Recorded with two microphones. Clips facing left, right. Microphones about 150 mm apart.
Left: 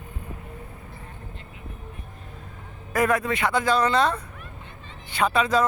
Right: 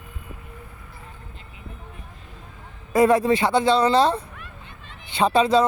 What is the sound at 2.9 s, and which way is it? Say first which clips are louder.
Speech: right 6 dB; 30° right (ahead or behind).